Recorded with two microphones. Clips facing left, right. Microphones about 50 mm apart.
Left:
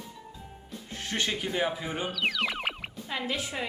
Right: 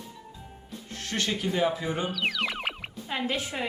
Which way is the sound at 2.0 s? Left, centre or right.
Centre.